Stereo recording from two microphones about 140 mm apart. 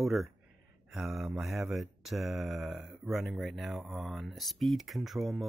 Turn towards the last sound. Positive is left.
turn(degrees=0)  # may be behind; listen again after turning